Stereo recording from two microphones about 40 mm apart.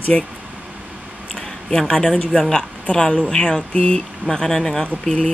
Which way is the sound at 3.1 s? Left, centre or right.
Centre.